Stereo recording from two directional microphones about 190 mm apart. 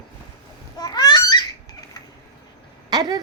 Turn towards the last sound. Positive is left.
turn(degrees=-20)  # may be behind; listen again after turning